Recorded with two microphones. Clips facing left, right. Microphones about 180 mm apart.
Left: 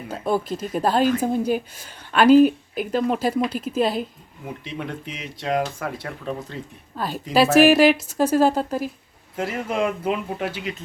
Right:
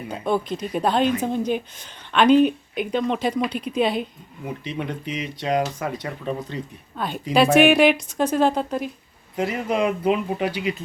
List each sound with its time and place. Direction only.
0.1 s a woman's voice: 5° left (ahead or behind)